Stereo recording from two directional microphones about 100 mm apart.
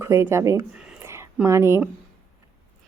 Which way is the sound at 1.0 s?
25° right (ahead or behind).